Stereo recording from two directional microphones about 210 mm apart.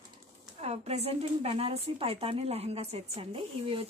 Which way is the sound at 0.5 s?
30° right (ahead or behind).